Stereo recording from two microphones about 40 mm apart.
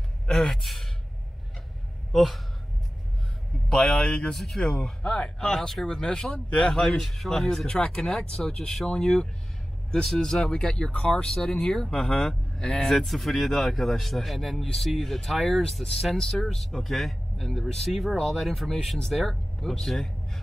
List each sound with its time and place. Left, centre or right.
0.3 s speech: centre
2.1 s speech: centre
3.6 s speech: centre
7.0 s speech: centre
10.4 s speech: left
11.3 s speech: centre